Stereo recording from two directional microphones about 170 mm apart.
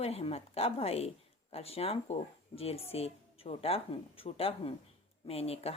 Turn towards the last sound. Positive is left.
turn(degrees=35)  # may be behind; listen again after turning